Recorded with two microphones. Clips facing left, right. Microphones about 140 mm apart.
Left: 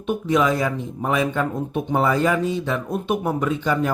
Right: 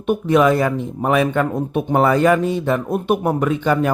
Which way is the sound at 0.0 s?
60° right (ahead or behind).